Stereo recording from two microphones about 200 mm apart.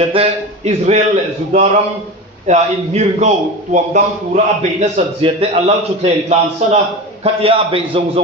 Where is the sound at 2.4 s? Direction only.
35° right (ahead or behind).